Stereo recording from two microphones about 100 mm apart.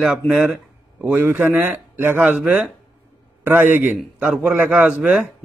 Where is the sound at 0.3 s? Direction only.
10° right (ahead or behind).